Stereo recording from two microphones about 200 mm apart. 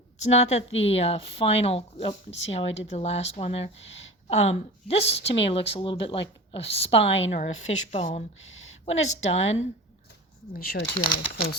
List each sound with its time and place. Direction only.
0.2 s speech: 35° left (ahead or behind)
3.8 s speech: 65° left (ahead or behind)
4.3 s speech: 30° left (ahead or behind)
8.4 s a sound: 75° left (ahead or behind)
8.9 s speech: 35° left (ahead or behind)
9.4 s speech: 70° left (ahead or behind)
10.5 s speech: 50° left (ahead or behind)